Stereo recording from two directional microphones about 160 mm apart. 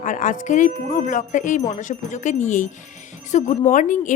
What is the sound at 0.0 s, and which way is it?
A woman's voice, 55° left (ahead or behind).